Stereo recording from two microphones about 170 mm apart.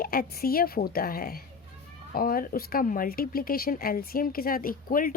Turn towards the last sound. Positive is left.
turn(degrees=55)  # may be behind; listen again after turning